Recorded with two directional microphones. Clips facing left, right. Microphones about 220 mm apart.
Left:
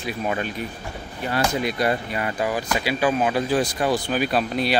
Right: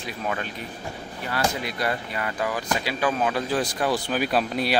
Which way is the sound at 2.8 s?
5° left (ahead or behind).